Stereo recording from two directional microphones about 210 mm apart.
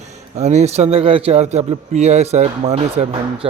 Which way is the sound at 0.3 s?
30° right (ahead or behind).